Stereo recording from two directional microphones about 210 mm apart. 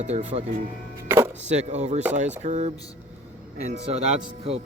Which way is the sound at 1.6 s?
35° right (ahead or behind).